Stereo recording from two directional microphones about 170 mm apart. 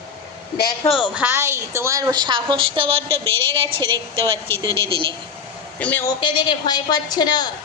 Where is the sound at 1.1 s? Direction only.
10° right (ahead or behind); by 3.0 s 30° right (ahead or behind).